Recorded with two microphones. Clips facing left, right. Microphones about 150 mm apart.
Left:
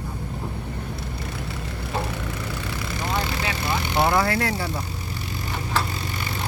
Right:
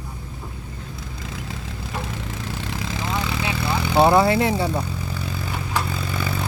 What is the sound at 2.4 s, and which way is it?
Vehicle, 90° right.